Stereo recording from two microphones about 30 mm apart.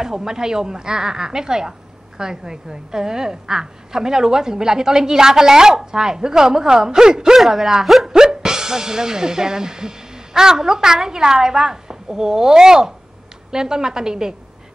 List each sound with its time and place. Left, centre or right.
0.0 s a woman's voice: right
7.3 s speech: centre
8.1 s a woman's voice: right